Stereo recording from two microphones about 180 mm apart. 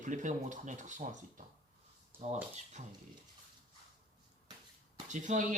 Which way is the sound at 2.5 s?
40° right (ahead or behind).